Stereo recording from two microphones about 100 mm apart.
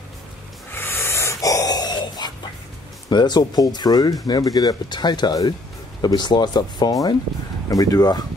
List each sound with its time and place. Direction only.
0.7 s snort: 25° left (ahead or behind); by 2.3 s 45° left (ahead or behind)
3.1 s speech: 45° left (ahead or behind)